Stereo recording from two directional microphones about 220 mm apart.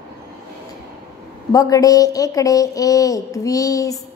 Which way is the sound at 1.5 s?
15° left (ahead or behind).